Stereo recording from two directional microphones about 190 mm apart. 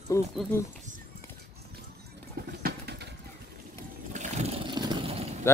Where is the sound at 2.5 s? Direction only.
55° right (ahead or behind).